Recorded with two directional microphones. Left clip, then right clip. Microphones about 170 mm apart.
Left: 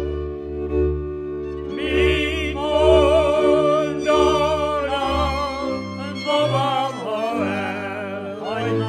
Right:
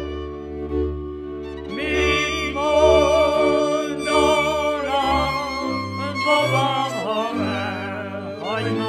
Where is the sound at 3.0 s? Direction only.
40° left (ahead or behind).